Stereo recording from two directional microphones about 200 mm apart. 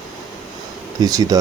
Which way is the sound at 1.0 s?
20° right (ahead or behind).